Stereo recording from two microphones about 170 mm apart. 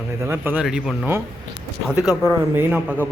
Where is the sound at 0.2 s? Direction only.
15° right (ahead or behind).